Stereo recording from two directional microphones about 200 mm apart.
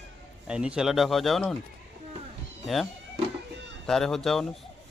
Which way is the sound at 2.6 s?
Centre (ahead or behind).